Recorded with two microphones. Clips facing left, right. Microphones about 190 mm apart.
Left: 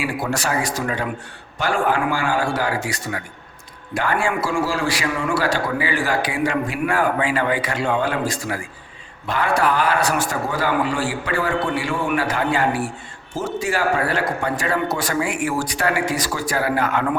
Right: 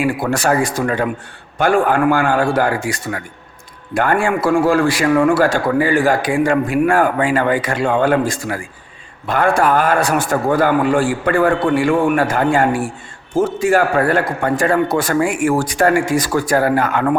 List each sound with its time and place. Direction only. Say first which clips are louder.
0.0 s a man's voice: right 6 dB; 55° right (ahead or behind)